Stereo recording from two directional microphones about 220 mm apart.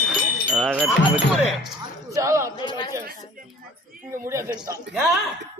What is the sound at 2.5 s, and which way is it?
Speech, 20° left (ahead or behind).